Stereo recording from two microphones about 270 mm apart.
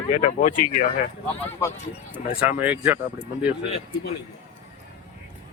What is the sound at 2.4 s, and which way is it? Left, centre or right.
Speech, centre.